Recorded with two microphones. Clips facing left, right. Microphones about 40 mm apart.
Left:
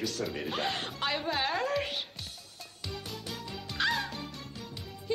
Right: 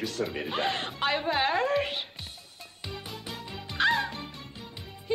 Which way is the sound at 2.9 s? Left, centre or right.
Centre.